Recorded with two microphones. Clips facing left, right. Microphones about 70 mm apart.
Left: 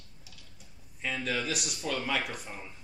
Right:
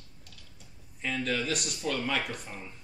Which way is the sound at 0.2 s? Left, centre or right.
Centre.